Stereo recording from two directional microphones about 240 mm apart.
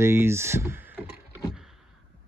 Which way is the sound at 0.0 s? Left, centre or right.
Centre.